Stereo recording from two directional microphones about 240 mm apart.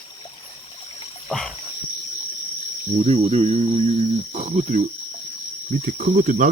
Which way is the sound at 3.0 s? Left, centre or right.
Right.